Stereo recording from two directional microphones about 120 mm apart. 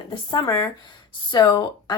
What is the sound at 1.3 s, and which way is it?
Speech, 35° left (ahead or behind).